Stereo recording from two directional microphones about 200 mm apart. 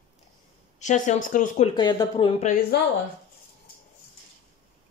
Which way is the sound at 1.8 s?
20° left (ahead or behind).